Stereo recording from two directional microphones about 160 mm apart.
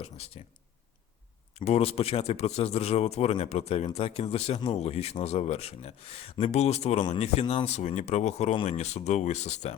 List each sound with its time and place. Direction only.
0.0 s a man's voice: 40° left (ahead or behind)
1.5 s a man's voice: 40° left (ahead or behind)